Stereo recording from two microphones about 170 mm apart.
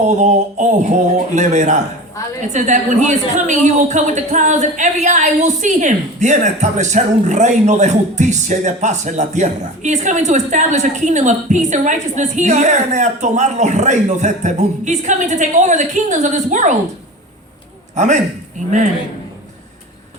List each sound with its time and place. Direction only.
0.0 s a woman's voice: 45° right (ahead or behind)
17.9 s a man's voice: 45° right (ahead or behind)